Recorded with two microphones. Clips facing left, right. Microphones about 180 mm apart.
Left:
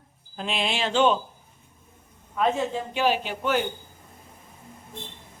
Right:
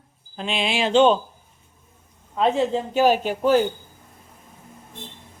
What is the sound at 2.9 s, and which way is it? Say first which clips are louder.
Speech: right 6 dB; 45° right (ahead or behind).